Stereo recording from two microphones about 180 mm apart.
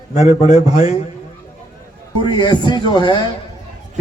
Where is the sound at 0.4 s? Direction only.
40° left (ahead or behind).